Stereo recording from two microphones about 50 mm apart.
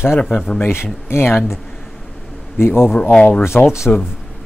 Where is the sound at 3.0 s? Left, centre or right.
Centre.